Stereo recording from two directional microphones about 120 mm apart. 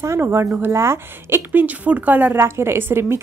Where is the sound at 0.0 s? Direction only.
20° right (ahead or behind).